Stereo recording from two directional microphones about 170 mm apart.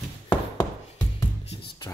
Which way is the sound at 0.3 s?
20° left (ahead or behind).